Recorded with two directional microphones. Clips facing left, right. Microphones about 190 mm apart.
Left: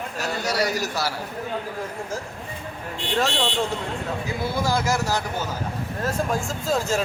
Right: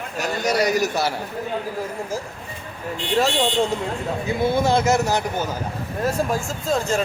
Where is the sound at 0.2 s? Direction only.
20° right (ahead or behind).